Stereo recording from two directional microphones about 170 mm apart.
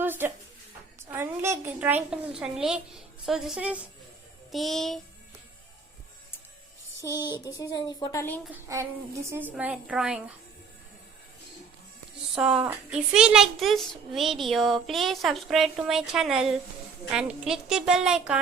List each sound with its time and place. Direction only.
0.0 s a sound: 10° right (ahead or behind)
1.0 s a child's voice: 15° right (ahead or behind); by 4.9 s centre (ahead or behind)
7.3 s speech: 20° left (ahead or behind)
8.7 s a woman's voice: 20° right (ahead or behind)
12.3 s a woman's voice: 5° right (ahead or behind)